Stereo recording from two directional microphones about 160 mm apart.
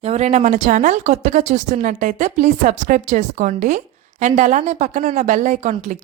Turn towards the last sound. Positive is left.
turn(degrees=-45)  # may be behind; listen again after turning